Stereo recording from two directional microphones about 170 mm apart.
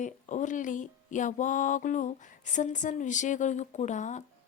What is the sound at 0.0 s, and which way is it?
Speech, 45° left (ahead or behind).